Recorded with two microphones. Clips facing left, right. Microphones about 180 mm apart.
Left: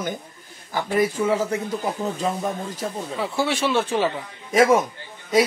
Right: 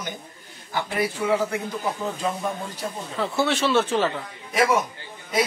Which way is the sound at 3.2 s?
10° left (ahead or behind).